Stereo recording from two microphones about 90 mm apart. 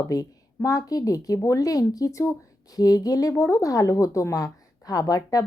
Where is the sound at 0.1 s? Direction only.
40° left (ahead or behind).